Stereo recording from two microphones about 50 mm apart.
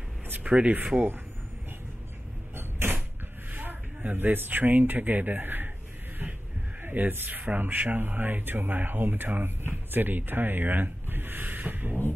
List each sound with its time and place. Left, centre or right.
0.3 s speech: right
2.5 s creak: right
3.5 s speech: right
6.8 s speech: right